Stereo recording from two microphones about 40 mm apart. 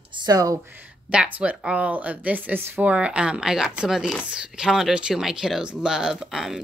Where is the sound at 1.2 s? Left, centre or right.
Right.